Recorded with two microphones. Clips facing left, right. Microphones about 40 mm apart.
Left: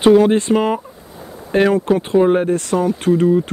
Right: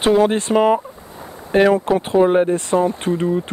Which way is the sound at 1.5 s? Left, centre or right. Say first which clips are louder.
Right 1 dB; right.